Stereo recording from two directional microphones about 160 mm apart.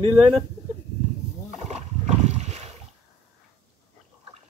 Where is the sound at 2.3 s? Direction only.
45° right (ahead or behind).